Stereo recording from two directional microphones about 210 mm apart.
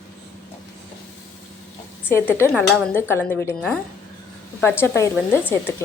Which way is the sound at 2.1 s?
10° left (ahead or behind).